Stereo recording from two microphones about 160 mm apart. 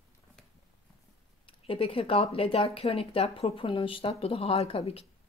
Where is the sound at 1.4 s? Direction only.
35° left (ahead or behind).